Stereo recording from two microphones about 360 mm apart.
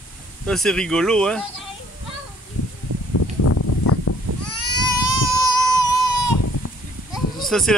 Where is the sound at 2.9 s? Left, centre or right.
Right.